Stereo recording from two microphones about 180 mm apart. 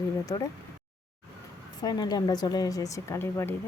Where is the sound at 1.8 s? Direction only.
20° left (ahead or behind).